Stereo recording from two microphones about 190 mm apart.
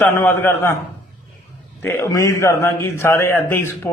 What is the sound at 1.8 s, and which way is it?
A man's voice, 15° left (ahead or behind).